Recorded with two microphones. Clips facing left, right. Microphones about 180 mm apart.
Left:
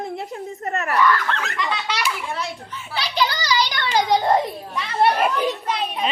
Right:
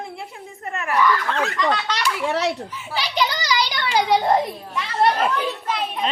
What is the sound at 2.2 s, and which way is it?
Speech, 80° right.